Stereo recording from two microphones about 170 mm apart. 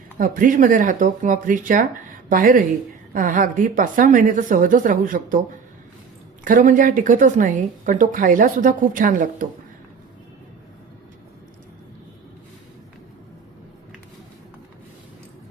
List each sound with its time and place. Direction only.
0.2 s a woman's voice: 50° right (ahead or behind)
6.4 s a woman's voice: 50° right (ahead or behind)